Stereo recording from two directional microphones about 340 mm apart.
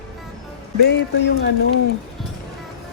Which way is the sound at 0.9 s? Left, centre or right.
Left.